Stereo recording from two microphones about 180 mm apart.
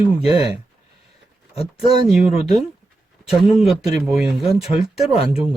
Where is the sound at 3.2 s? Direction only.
Centre (ahead or behind).